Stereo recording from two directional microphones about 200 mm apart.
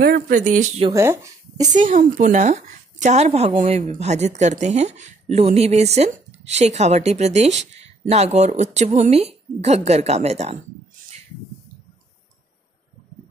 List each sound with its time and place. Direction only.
0.0 s a woman's voice: 45° right (ahead or behind)
0.8 s speech: 15° right (ahead or behind)
1.7 s a woman's voice: 40° right (ahead or behind)